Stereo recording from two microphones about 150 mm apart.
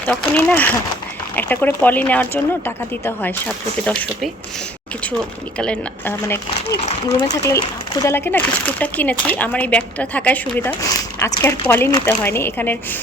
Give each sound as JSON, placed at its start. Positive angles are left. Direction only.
{"t": 0.0, "sound": "speech", "side_deg": 10}
{"t": 5.5, "sound": "speech", "side_deg": 5}
{"t": 6.2, "sound": "speech", "side_deg": 25}
{"t": 6.8, "sound": "speech", "side_deg": 50}
{"t": 7.3, "sound": "speech", "side_deg": 20}
{"t": 10.8, "sound": "speech", "side_deg": 20}